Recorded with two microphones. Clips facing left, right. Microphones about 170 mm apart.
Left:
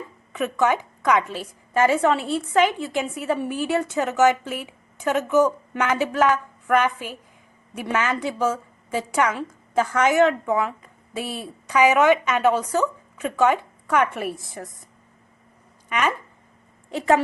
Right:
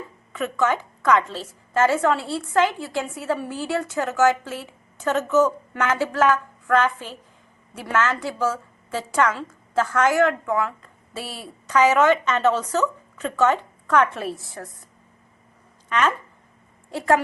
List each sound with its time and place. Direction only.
0.3 s a woman's voice: 15° left (ahead or behind)
16.9 s a woman's voice: 20° left (ahead or behind)